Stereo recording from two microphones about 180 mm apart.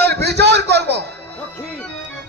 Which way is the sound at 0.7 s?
65° right (ahead or behind).